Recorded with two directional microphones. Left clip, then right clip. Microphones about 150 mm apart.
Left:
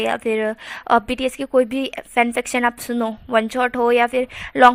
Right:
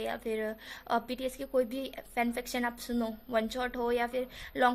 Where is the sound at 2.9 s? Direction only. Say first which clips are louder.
Left 12 dB; 25° left (ahead or behind).